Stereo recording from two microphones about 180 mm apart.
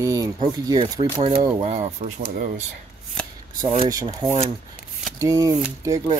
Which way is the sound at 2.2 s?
55° right (ahead or behind).